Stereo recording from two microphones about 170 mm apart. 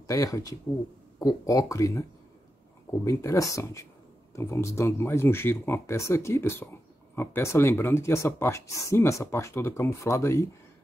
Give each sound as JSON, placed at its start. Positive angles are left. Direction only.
{"t": 0.0, "sound": "speech", "side_deg": 20}
{"t": 3.1, "sound": "speech", "side_deg": 20}